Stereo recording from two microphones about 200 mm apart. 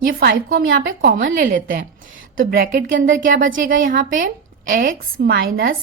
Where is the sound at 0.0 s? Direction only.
45° right (ahead or behind).